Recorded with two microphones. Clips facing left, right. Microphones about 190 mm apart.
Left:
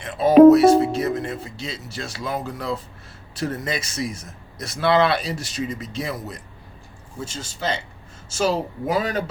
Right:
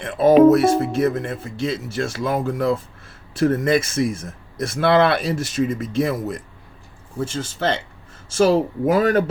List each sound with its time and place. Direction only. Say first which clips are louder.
0.0 s speech: left 2 dB; 50° right (ahead or behind)